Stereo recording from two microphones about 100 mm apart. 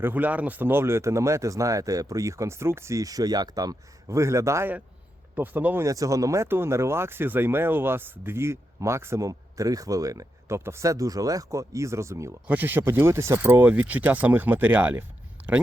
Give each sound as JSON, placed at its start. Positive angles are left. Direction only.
{"t": 0.0, "sound": "speech", "side_deg": -15}
{"t": 5.3, "sound": "speech", "side_deg": -15}
{"t": 5.8, "sound": "speech", "side_deg": -35}
{"t": 12.5, "sound": "speech", "side_deg": -20}
{"t": 15.4, "sound": "a sound", "side_deg": -15}